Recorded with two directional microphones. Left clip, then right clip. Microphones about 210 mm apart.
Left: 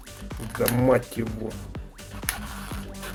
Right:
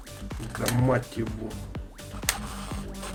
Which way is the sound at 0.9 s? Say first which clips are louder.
Left 6 dB; 50° left (ahead or behind).